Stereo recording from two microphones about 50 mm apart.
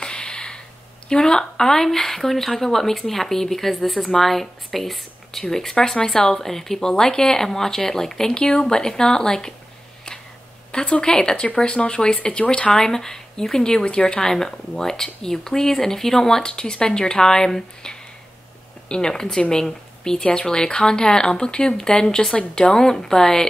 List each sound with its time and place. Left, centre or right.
0.0 s a sound: centre
1.0 s speech: centre
10.7 s speech: centre